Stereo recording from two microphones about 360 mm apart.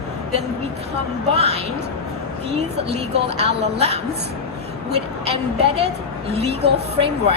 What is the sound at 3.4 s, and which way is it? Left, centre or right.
Speech, centre.